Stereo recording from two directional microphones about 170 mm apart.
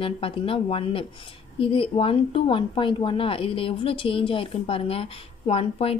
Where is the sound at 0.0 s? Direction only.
30° left (ahead or behind).